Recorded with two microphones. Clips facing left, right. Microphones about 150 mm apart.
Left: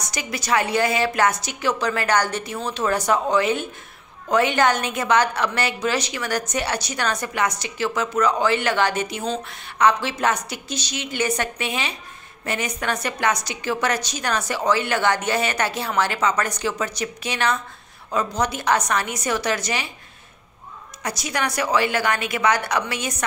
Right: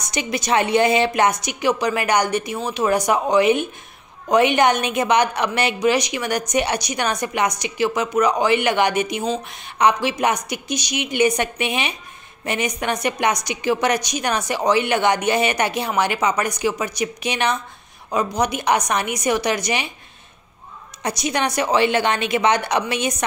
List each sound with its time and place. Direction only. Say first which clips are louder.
0.0 s a woman's voice: right 5 dB; 20° right (ahead or behind)
21.0 s a woman's voice: right 4 dB; 20° right (ahead or behind)